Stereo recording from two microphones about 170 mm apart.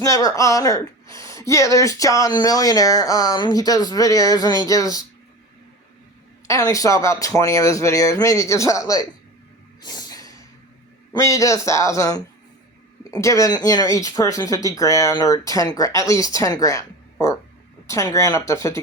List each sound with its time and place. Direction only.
0.0 s speech: 20° left (ahead or behind)
6.5 s speech: 20° left (ahead or behind)
9.8 s snort: 25° left (ahead or behind)
11.1 s speech: 20° left (ahead or behind)